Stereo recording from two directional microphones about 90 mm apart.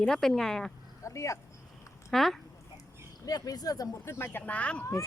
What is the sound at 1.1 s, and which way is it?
Speech, 35° left (ahead or behind).